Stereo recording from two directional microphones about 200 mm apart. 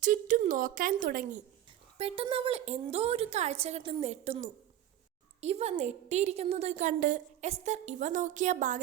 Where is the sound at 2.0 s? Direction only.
30° right (ahead or behind).